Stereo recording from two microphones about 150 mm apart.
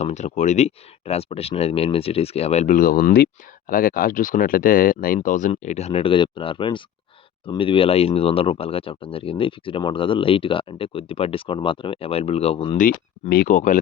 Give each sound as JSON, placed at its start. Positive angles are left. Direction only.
{"t": 0.0, "sound": "speech", "side_deg": 50}
{"t": 2.7, "sound": "speech", "side_deg": 70}
{"t": 3.7, "sound": "speech", "side_deg": 65}
{"t": 12.7, "sound": "speech", "side_deg": 65}